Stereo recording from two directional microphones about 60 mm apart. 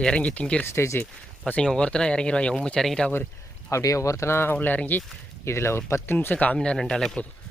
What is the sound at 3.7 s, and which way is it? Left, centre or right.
Speech, left.